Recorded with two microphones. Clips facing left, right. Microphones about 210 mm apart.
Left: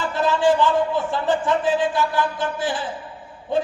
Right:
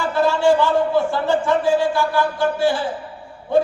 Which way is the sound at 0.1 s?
20° left (ahead or behind).